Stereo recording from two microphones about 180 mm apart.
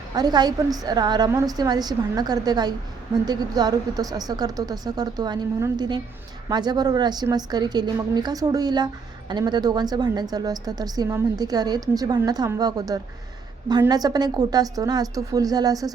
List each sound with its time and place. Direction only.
0.1 s a woman's voice: 20° right (ahead or behind)